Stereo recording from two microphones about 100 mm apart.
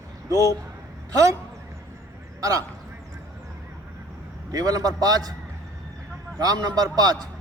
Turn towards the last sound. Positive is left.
turn(degrees=-40)  # may be behind; listen again after turning